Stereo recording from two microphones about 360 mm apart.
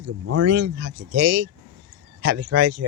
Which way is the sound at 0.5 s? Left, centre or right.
Right.